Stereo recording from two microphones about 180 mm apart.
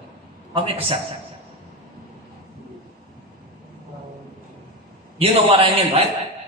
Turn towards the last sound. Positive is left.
turn(degrees=-35)  # may be behind; listen again after turning